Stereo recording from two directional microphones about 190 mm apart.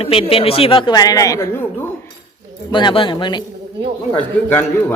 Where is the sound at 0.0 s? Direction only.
30° left (ahead or behind); by 1.9 s 15° left (ahead or behind).